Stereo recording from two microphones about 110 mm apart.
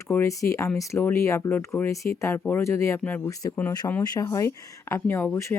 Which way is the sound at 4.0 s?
35° left (ahead or behind).